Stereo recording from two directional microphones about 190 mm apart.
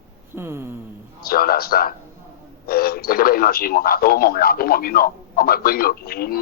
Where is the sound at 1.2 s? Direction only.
50° left (ahead or behind).